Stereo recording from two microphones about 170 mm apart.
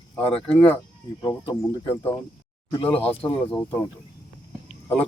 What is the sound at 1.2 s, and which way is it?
Speech, 20° left (ahead or behind).